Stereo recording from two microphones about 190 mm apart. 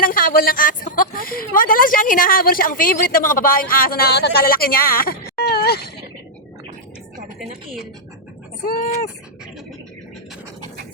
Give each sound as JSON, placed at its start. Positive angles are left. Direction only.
{"t": 0.0, "sound": "a woman's voice", "side_deg": 50}
{"t": 8.6, "sound": "a woman's voice", "side_deg": 50}